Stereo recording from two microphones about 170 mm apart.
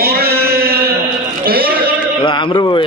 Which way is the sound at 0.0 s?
65° right (ahead or behind).